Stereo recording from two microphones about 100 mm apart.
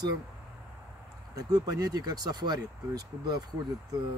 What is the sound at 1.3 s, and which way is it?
Speech, 40° right (ahead or behind).